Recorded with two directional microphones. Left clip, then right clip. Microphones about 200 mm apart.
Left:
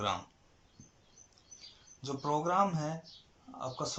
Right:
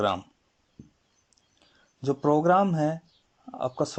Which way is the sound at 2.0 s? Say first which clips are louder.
Right 11 dB; 50° right (ahead or behind).